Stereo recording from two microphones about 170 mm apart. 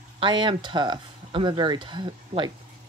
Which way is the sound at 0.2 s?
30° right (ahead or behind).